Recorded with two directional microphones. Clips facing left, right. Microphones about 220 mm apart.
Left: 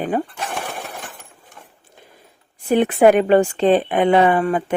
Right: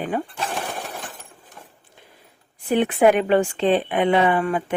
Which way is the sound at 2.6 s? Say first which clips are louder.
Left 3 dB; 45° left (ahead or behind).